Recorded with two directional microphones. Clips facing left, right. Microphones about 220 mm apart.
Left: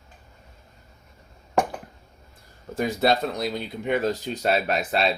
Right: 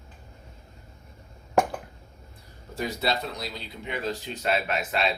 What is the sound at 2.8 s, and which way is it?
Speech, 50° left (ahead or behind).